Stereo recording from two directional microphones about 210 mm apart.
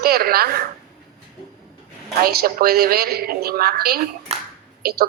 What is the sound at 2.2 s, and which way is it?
A man's voice, 45° right (ahead or behind).